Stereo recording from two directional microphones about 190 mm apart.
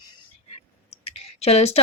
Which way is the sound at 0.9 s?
35° left (ahead or behind).